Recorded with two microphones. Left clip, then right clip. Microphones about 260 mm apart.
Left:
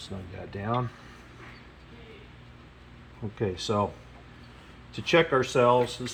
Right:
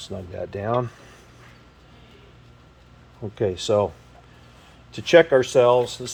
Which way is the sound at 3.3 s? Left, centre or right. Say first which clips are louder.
Right 7 dB; right.